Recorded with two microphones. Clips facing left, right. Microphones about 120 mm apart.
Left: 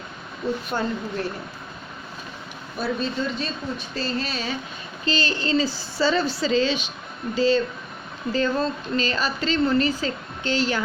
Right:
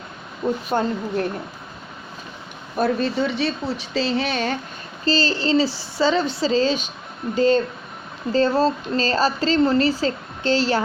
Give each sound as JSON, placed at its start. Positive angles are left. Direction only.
{"t": 0.4, "sound": "speech", "side_deg": -50}
{"t": 2.7, "sound": "speech", "side_deg": -60}
{"t": 5.0, "sound": "a woman's voice", "side_deg": -35}
{"t": 6.0, "sound": "speech", "side_deg": -20}
{"t": 8.3, "sound": "a woman's voice", "side_deg": -35}